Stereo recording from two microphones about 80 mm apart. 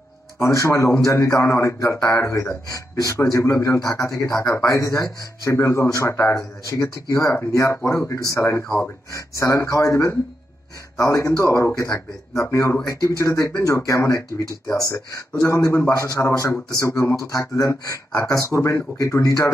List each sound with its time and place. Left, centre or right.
0.4 s a man's voice: left